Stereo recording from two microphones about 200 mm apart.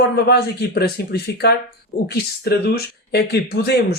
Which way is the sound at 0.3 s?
55° left (ahead or behind).